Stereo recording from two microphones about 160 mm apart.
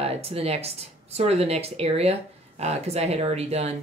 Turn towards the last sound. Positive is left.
turn(degrees=-40)  # may be behind; listen again after turning